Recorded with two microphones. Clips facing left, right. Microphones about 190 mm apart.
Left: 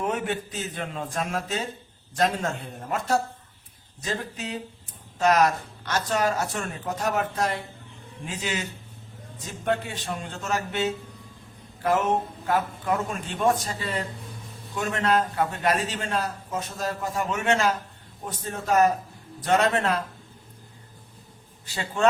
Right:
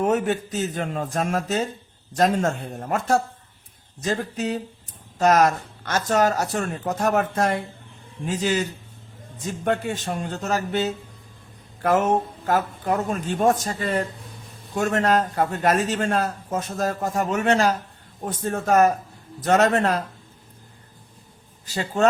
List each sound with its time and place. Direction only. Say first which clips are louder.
0.0 s a man's voice: right 6 dB; 40° right (ahead or behind)
8.3 s a man's voice: right 8 dB; 40° right (ahead or behind)
9.6 s a man's voice: right 3 dB; 50° right (ahead or behind)
11.8 s a man's voice: right 3 dB; 50° right (ahead or behind)
18.3 s a man's voice: right 5 dB; 50° right (ahead or behind)
21.7 s a man's voice: right 5 dB; 40° right (ahead or behind)